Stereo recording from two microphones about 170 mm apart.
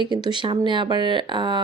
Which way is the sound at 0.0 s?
25° right (ahead or behind).